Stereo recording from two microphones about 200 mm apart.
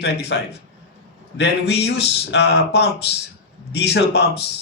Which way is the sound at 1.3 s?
60° left (ahead or behind).